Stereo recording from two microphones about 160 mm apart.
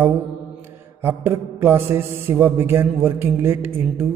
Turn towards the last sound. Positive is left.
turn(degrees=-15)  # may be behind; listen again after turning